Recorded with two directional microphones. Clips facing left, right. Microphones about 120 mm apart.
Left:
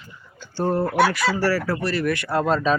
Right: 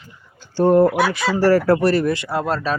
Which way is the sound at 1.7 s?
55° right (ahead or behind).